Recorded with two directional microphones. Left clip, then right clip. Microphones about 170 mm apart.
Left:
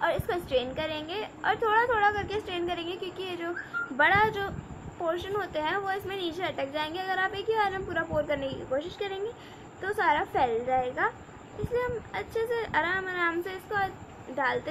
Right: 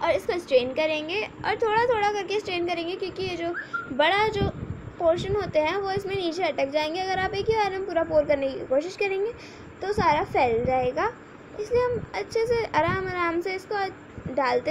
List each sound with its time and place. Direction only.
0.0 s a woman's voice: 10° right (ahead or behind)
4.0 s a woman's voice: 15° right (ahead or behind)